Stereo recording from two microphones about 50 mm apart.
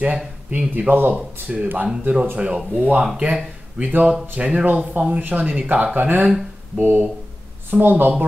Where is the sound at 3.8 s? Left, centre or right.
Right.